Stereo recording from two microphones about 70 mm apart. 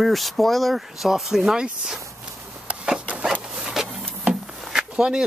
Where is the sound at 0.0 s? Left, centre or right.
Centre.